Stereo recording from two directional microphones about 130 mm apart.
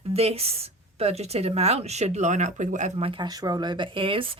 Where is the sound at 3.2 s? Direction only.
30° right (ahead or behind).